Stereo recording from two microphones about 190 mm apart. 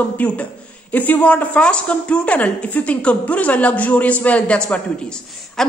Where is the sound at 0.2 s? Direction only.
10° left (ahead or behind).